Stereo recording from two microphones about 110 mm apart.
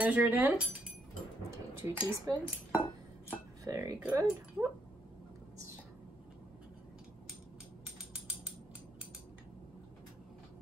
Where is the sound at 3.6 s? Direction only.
25° right (ahead or behind).